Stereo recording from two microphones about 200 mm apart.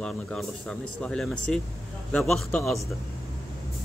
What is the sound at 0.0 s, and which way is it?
Speech, 5° left (ahead or behind).